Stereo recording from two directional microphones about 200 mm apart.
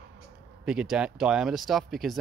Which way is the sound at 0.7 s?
5° right (ahead or behind).